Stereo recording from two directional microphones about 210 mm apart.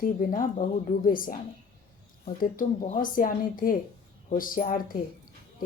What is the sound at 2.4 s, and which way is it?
A woman's voice, 35° left (ahead or behind).